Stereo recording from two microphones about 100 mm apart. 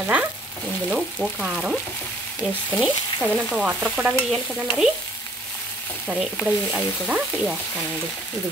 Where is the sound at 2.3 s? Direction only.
Centre (ahead or behind).